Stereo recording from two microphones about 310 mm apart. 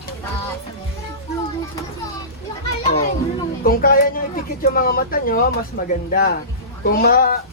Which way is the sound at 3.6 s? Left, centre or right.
Left.